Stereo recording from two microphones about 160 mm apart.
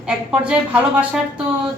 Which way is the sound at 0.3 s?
5° right (ahead or behind).